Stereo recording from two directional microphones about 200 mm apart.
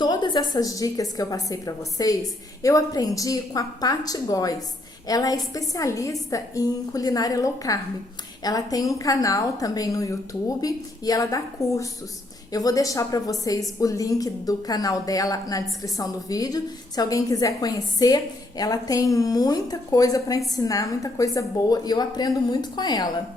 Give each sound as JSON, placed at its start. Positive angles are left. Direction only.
{"t": 0.0, "sound": "a woman's voice", "side_deg": 20}